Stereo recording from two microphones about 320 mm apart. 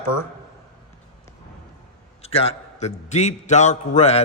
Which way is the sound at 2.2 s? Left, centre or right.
Centre.